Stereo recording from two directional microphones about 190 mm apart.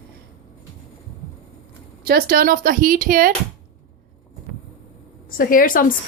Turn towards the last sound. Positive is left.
turn(degrees=45)  # may be behind; listen again after turning